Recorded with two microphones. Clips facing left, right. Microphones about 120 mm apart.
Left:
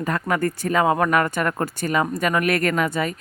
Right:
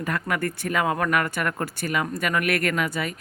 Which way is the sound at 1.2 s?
45° left (ahead or behind).